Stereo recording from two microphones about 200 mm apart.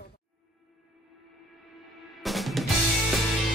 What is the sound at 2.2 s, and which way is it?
Music, centre (ahead or behind).